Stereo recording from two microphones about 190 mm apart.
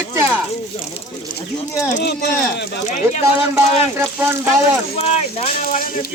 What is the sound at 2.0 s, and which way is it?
Speech, 60° left (ahead or behind).